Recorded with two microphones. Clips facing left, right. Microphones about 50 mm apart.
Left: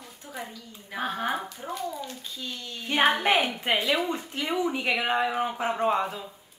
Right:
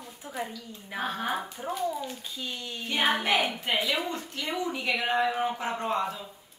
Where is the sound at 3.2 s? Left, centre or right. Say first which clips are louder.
Left 3 dB; left.